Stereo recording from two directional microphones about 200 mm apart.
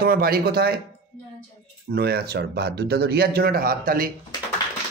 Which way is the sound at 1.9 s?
50° right (ahead or behind).